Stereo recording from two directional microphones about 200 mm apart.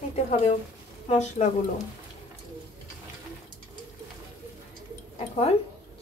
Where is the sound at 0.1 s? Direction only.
35° left (ahead or behind).